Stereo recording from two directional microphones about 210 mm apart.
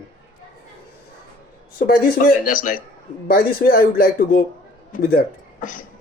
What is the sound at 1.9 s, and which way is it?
Speech, 40° left (ahead or behind).